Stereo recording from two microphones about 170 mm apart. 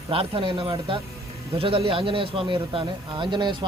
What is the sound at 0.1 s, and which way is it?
Speech, 30° right (ahead or behind).